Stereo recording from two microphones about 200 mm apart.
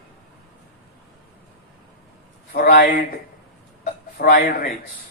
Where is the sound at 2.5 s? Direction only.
50° left (ahead or behind).